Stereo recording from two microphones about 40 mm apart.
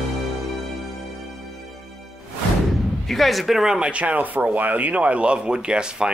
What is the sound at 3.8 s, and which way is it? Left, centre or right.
Speech, right.